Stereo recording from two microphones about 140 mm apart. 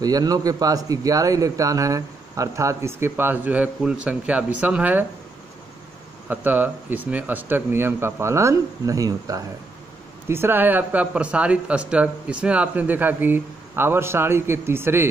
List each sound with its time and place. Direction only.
0.0 s a man's voice: 25° right (ahead or behind); by 5.0 s 10° right (ahead or behind)
6.2 s speech: 10° right (ahead or behind)